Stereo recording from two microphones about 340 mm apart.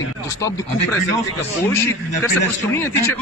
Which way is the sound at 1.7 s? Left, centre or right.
Centre.